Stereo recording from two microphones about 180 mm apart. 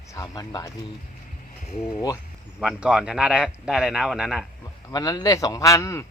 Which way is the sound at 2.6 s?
5° right (ahead or behind).